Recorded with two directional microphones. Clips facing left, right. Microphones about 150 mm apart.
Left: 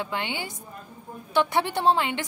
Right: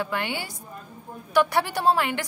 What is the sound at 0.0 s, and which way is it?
A woman's voice, 20° left (ahead or behind).